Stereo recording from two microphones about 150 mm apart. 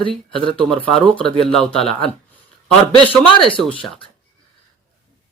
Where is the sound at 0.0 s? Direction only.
35° right (ahead or behind).